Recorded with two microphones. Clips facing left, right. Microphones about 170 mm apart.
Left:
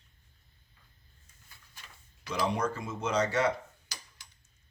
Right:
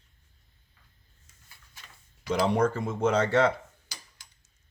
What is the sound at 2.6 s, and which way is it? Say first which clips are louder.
Speech: right 8 dB; 55° right (ahead or behind).